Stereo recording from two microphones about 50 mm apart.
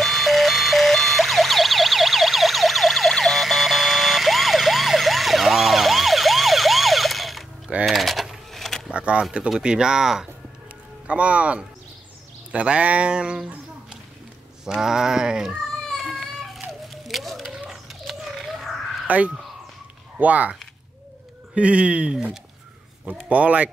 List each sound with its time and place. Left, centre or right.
0.0 s car alarm: centre
7.8 s a sound: centre
8.9 s a sound: right
9.6 s speech: centre
11.1 s speech: right
14.8 s speech: centre
16.3 s a sound: centre
19.0 s speech: right
21.5 s speech: right